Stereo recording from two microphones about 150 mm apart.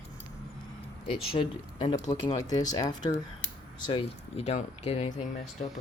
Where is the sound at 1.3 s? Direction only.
35° left (ahead or behind).